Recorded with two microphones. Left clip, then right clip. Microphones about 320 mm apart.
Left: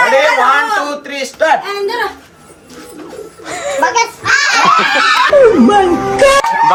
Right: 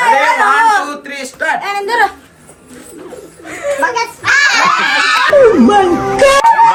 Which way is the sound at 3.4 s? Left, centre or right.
Centre.